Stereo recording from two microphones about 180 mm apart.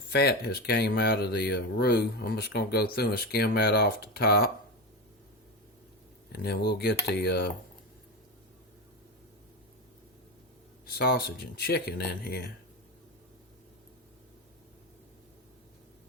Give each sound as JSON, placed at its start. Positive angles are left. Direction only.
{"t": 0.1, "sound": "speech", "side_deg": 65}
{"t": 6.3, "sound": "speech", "side_deg": 60}
{"t": 10.8, "sound": "speech", "side_deg": 60}